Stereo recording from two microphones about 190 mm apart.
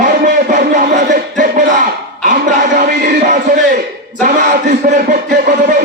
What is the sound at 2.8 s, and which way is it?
Music, 40° right (ahead or behind).